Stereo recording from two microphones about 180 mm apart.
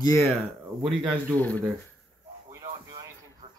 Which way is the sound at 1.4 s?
10° left (ahead or behind).